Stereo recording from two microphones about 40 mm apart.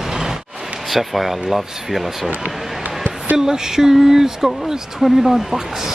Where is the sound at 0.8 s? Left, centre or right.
Centre.